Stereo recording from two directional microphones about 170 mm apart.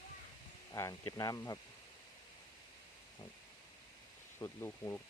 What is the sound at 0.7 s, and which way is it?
Speech, 20° left (ahead or behind).